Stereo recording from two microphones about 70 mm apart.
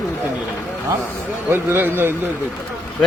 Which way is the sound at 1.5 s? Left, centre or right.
Right.